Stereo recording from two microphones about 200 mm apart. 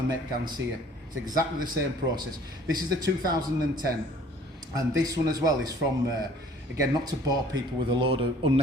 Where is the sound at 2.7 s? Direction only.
20° right (ahead or behind).